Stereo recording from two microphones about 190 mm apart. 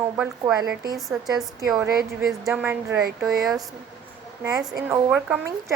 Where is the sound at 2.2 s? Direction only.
15° right (ahead or behind).